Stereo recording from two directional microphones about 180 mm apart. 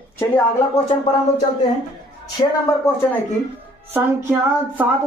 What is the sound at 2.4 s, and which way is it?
Speech, 30° left (ahead or behind).